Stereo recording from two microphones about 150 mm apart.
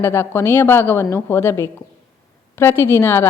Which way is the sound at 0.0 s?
15° left (ahead or behind).